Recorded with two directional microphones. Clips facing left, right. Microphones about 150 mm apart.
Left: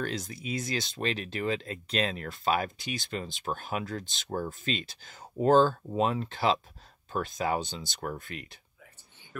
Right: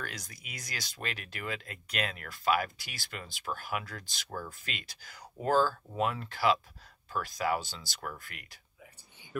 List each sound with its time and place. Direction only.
0.0 s speech: 25° left (ahead or behind)